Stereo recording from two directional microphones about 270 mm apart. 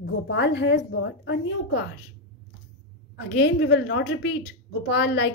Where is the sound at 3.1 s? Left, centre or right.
Left.